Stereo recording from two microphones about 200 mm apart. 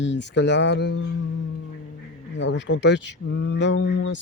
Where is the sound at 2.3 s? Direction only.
60° left (ahead or behind).